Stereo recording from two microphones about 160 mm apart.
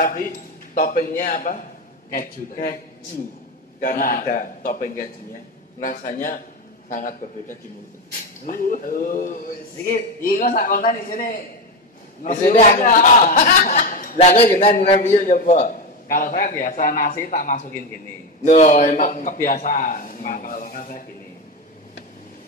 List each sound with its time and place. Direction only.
0.0 s a man's voice: 65° left (ahead or behind)
3.8 s a man's voice: 60° left (ahead or behind)
8.5 s a man's voice: 60° left (ahead or behind)
14.1 s a man's voice: 40° left (ahead or behind)
15.0 s a man's voice: 50° left (ahead or behind)